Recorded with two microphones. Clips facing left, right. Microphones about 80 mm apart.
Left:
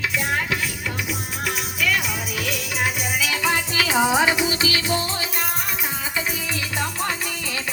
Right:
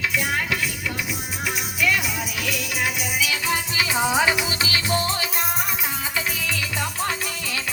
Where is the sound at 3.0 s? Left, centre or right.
Left.